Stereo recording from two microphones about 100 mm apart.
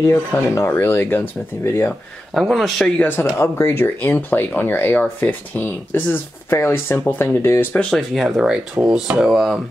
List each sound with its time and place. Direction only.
0.0 s speech: 30° left (ahead or behind)
2.3 s speech: centre (ahead or behind)
3.0 s speech: 20° left (ahead or behind)
7.7 s speech: 10° left (ahead or behind)